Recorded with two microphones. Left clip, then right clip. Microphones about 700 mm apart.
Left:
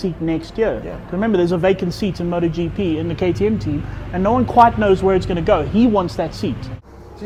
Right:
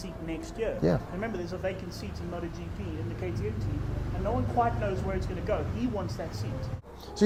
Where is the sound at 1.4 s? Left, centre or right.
Left.